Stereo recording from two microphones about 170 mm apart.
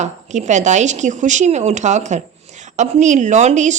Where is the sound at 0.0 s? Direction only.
45° right (ahead or behind).